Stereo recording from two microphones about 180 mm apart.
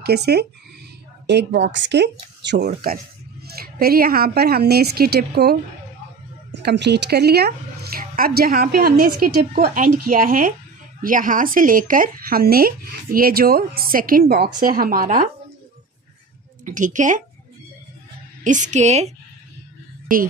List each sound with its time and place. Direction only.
0.0 s a woman's voice: 65° right (ahead or behind)
6.5 s a woman's voice: 75° right (ahead or behind); by 15.2 s 50° right (ahead or behind)
16.6 s speech: 45° right (ahead or behind)
18.4 s a woman's voice: 45° right (ahead or behind)